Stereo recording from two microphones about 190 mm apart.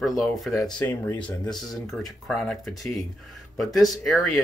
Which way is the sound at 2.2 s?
Centre (ahead or behind).